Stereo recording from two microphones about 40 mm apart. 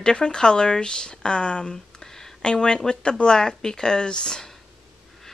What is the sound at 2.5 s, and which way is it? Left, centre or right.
Speech, left.